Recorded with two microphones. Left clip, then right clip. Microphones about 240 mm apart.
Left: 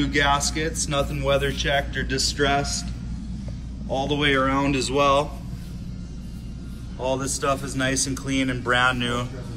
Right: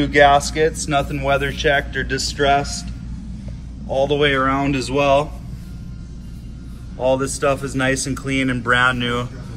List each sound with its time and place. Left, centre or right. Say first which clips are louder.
0.0 s a man's voice: right 8 dB; centre
3.9 s a man's voice: right 5 dB; centre
7.1 s a man's voice: right 6 dB; centre
8.6 s speech: right 4 dB; right